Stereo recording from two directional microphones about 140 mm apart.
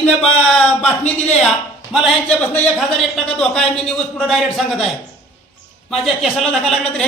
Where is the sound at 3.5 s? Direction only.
5° left (ahead or behind).